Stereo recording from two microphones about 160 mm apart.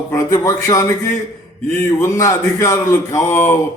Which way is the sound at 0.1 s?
20° left (ahead or behind).